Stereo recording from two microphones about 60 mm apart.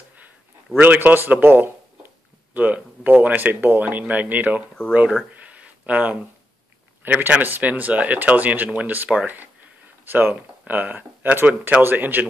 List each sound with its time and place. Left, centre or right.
0.7 s speech: right
5.3 s a sound: right
7.0 s speech: right